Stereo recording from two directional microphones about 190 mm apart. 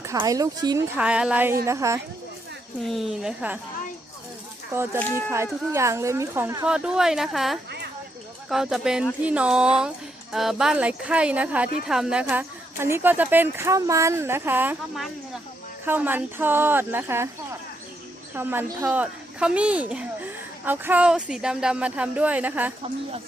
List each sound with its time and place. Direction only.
0.0 s speech: 15° right (ahead or behind)
0.9 s speech: 5° right (ahead or behind)
2.8 s a woman's voice: centre (ahead or behind)
4.9 s speech: 10° left (ahead or behind)
5.7 s a woman's voice: 15° right (ahead or behind)
18.3 s speech: 10° right (ahead or behind)